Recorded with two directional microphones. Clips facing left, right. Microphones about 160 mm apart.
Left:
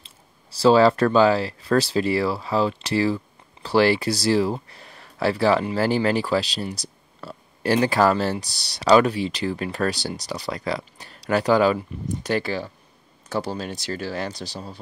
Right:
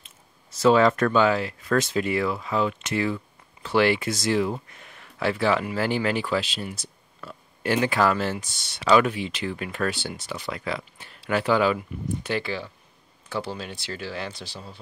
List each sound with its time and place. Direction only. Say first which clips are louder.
0.0 s speech: left 2 dB; 30° left (ahead or behind)